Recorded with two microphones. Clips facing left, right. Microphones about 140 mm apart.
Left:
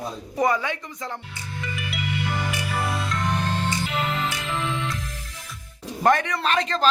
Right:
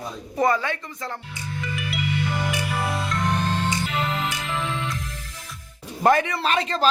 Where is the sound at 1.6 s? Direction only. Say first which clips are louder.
Right 2 dB; centre (ahead or behind).